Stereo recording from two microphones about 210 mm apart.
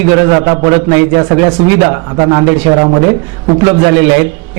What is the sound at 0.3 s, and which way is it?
A man's voice, 25° right (ahead or behind).